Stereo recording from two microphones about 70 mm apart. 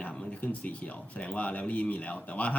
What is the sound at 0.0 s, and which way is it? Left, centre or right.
Speech, centre.